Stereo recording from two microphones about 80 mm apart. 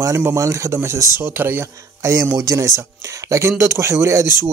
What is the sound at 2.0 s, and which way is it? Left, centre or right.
Speech, right.